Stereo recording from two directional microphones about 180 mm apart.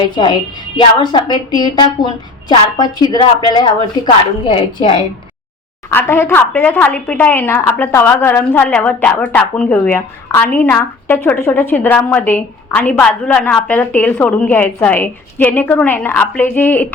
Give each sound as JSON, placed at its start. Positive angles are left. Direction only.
{"t": 0.8, "sound": "a woman's voice", "side_deg": 25}
{"t": 5.9, "sound": "a woman's voice", "side_deg": 15}